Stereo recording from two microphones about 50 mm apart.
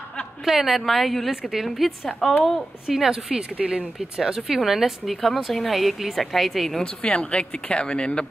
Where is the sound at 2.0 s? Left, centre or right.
Centre.